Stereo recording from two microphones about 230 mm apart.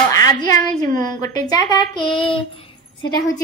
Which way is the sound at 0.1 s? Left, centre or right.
Centre.